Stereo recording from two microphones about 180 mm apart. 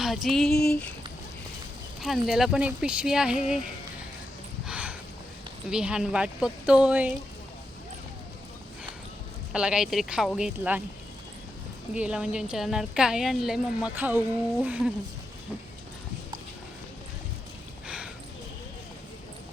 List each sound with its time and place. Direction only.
0.0 s speech: centre (ahead or behind)
2.0 s speech: centre (ahead or behind)
4.6 s a sound: 5° right (ahead or behind)
5.7 s speech: 5° right (ahead or behind)
9.5 s speech: 5° right (ahead or behind)
11.9 s speech: 5° right (ahead or behind)
17.8 s a sound: 5° right (ahead or behind)